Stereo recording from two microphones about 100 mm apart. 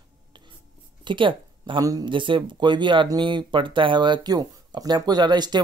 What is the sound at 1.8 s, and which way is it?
Speech, 35° right (ahead or behind).